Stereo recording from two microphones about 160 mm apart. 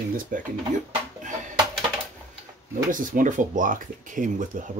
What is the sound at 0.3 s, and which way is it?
Speech, 55° right (ahead or behind).